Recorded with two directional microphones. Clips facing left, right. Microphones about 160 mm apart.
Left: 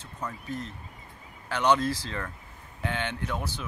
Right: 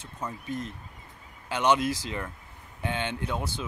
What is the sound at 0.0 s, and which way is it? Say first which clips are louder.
Speech: right 1 dB; 15° right (ahead or behind).